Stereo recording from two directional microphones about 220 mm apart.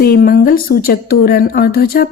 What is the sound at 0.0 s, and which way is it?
Speech, 45° left (ahead or behind).